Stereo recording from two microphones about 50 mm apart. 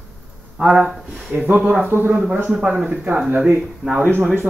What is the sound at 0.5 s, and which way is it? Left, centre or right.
Speech, centre.